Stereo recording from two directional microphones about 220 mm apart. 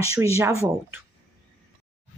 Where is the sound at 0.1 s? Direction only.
15° right (ahead or behind).